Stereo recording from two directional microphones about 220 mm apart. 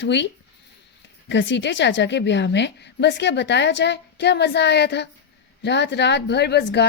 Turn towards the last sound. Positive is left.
turn(degrees=50)  # may be behind; listen again after turning